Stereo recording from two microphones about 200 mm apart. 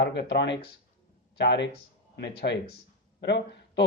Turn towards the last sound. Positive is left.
turn(degrees=60)  # may be behind; listen again after turning